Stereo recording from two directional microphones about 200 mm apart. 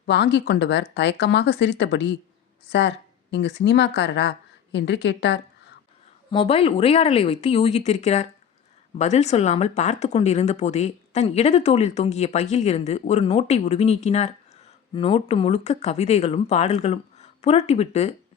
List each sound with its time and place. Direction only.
0.0 s speech: 60° left (ahead or behind)
6.3 s speech: 30° left (ahead or behind)